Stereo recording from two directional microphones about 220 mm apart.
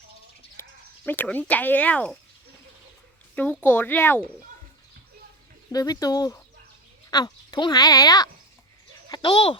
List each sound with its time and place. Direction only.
1.0 s speech: 10° left (ahead or behind)
3.3 s speech: 5° left (ahead or behind)
5.7 s speech: 15° left (ahead or behind)
9.0 s a sound: 20° left (ahead or behind)